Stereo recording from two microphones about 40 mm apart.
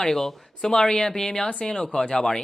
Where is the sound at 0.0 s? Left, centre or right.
Centre.